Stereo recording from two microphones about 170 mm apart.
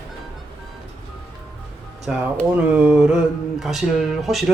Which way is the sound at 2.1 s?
10° right (ahead or behind).